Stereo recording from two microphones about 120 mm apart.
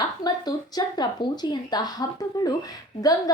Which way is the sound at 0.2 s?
35° left (ahead or behind).